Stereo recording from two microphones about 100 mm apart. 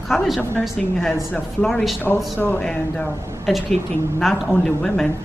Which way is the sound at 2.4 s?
15° left (ahead or behind).